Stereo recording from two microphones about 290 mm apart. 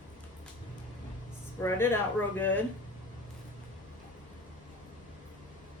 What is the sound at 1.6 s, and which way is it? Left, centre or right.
Speech, centre.